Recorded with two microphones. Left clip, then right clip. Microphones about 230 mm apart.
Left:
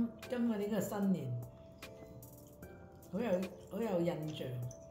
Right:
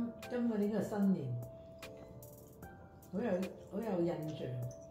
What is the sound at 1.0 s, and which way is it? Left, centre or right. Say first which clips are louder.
Music: right 1 dB; centre.